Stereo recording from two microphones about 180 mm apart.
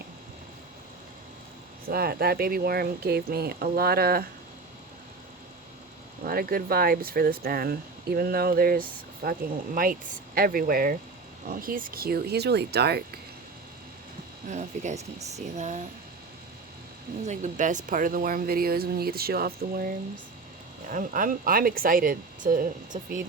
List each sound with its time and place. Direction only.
1.9 s speech: 60° right (ahead or behind)
6.2 s speech: 55° right (ahead or behind)
14.4 s speech: 40° right (ahead or behind)
17.2 s speech: 45° right (ahead or behind)
20.9 s speech: 45° right (ahead or behind)